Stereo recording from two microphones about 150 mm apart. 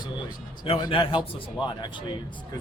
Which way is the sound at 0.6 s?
30° left (ahead or behind).